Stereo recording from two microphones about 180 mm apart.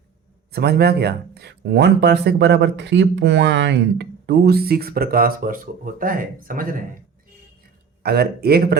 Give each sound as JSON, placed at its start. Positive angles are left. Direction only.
{"t": 0.5, "sound": "speech", "side_deg": -60}
{"t": 8.0, "sound": "speech", "side_deg": -60}